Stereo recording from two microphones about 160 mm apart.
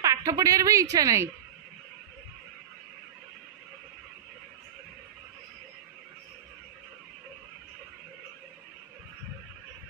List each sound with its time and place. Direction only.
0.0 s a woman's voice: 20° right (ahead or behind)